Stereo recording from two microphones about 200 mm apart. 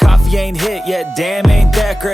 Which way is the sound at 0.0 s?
Centre (ahead or behind).